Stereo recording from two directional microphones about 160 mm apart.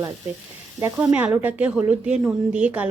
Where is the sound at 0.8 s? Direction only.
15° right (ahead or behind).